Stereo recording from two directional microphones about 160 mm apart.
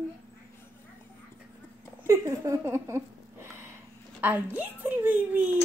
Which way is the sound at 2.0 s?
20° right (ahead or behind).